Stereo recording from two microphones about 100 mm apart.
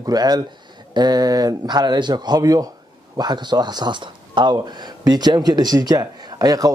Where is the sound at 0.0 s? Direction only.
40° right (ahead or behind).